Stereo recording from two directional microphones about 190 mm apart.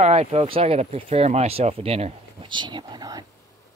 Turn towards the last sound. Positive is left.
turn(degrees=-20)  # may be behind; listen again after turning